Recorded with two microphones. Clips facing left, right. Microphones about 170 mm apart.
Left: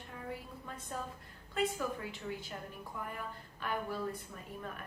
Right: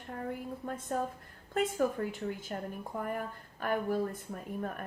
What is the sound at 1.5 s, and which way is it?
A woman's voice, 45° right (ahead or behind).